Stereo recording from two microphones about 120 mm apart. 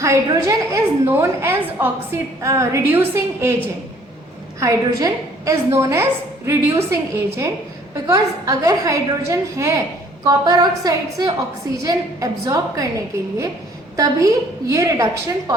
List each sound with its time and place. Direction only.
0.0 s a woman's voice: 25° right (ahead or behind)
4.6 s a woman's voice: 30° right (ahead or behind)
13.9 s a woman's voice: 30° right (ahead or behind)